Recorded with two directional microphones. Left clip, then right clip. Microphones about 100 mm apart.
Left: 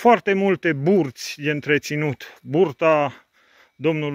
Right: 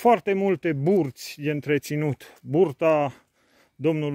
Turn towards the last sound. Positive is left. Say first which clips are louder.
# left 2 dB
turn(degrees=-45)  # may be behind; listen again after turning